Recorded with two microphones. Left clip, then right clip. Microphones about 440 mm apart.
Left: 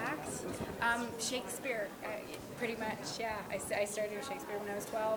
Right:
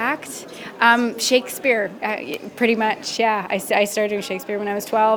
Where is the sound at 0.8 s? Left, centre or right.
Right.